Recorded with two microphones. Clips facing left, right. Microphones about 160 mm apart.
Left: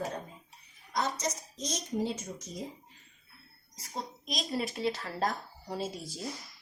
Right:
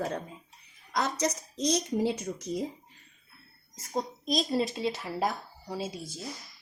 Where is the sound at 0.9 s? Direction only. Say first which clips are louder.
Right 3 dB; 75° right (ahead or behind).